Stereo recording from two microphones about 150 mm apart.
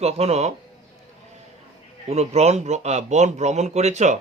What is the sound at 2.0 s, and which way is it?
A man's voice, 45° right (ahead or behind).